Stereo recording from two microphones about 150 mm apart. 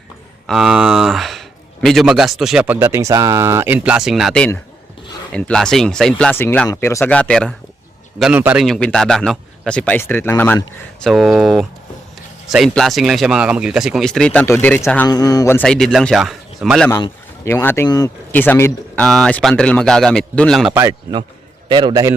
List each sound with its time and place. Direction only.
0.4 s speech: 5° right (ahead or behind)
2.7 s speech: 15° right (ahead or behind); by 7.5 s 5° left (ahead or behind)
8.2 s speech: 10° right (ahead or behind)
8.6 s speech: 5° left (ahead or behind)
11.0 s speech: centre (ahead or behind)
15.0 s speech: 25° left (ahead or behind)
15.5 s speech: 5° left (ahead or behind)
17.4 s speech: 15° left (ahead or behind)
18.3 s a man's voice: 15° left (ahead or behind)
19.0 s speech: 5° left (ahead or behind)
21.7 s a man's voice: 30° right (ahead or behind)